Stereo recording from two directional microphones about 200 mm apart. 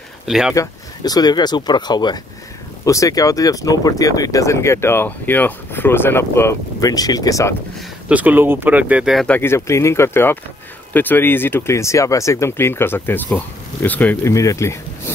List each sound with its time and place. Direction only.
0.3 s speech: 5° right (ahead or behind)
0.6 s speech: 20° left (ahead or behind)
8.1 s speech: 10° right (ahead or behind); by 15.1 s 15° left (ahead or behind)